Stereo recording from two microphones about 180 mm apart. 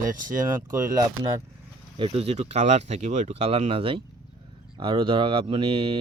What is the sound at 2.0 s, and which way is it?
Speech, 35° right (ahead or behind).